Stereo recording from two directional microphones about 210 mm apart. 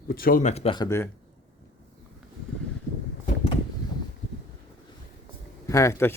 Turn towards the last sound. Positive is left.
turn(degrees=15)  # may be behind; listen again after turning